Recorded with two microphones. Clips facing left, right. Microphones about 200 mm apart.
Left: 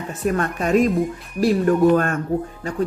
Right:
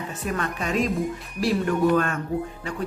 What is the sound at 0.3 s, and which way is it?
A woman's voice, 50° left (ahead or behind).